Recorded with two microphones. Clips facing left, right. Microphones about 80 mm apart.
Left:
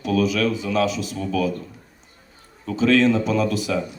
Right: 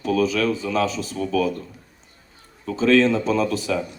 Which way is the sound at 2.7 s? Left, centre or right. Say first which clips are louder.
Even; right.